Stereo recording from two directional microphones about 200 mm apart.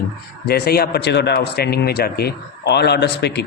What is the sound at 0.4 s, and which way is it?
Speech, 50° left (ahead or behind).